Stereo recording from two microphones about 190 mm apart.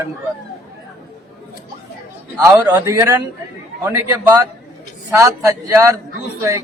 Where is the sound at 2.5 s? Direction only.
15° right (ahead or behind).